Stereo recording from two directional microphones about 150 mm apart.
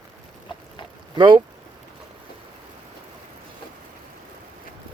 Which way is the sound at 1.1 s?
30° right (ahead or behind).